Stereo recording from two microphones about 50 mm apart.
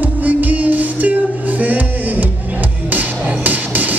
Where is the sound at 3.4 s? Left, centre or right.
Right.